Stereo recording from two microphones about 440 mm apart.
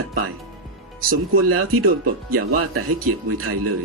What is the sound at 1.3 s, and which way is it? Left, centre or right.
Speech, right.